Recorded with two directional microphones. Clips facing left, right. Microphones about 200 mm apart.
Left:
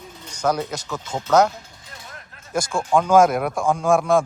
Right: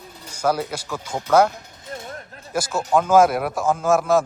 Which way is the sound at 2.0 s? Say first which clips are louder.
Right 7 dB; 35° right (ahead or behind).